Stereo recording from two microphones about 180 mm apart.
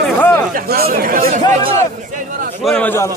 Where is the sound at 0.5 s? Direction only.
55° right (ahead or behind).